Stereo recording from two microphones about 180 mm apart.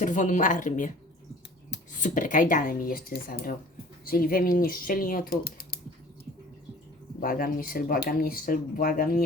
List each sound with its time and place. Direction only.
0.0 s speech: 45° left (ahead or behind)
2.0 s speech: 45° left (ahead or behind)
7.2 s speech: 50° left (ahead or behind)